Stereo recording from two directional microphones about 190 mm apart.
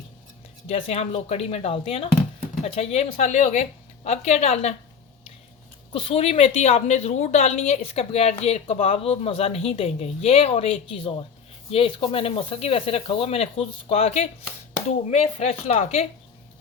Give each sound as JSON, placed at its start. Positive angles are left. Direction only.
{"t": 0.7, "sound": "a woman's voice", "side_deg": 30}
{"t": 5.9, "sound": "a woman's voice", "side_deg": 30}